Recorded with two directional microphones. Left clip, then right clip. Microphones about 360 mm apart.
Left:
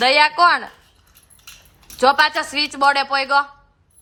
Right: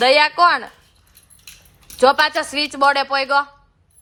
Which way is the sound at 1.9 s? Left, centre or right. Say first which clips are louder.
Right 1 dB; centre.